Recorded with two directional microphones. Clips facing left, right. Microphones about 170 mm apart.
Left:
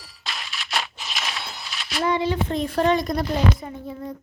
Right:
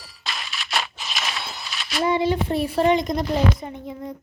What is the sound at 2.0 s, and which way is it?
A woman's voice, 10° right (ahead or behind).